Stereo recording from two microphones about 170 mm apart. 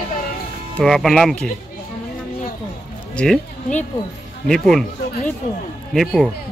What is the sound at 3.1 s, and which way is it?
Speech, 5° left (ahead or behind).